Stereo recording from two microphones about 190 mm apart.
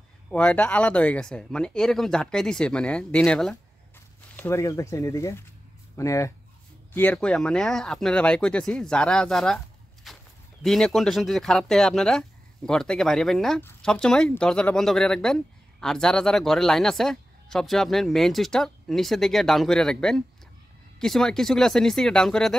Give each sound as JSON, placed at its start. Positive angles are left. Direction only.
{"t": 0.3, "sound": "speech", "side_deg": 5}
{"t": 4.4, "sound": "speech", "side_deg": 15}
{"t": 10.1, "sound": "livestock", "side_deg": 0}
{"t": 10.6, "sound": "speech", "side_deg": 0}